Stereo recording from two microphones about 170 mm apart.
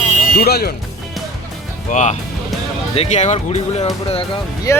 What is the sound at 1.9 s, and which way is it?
Speech, 45° left (ahead or behind).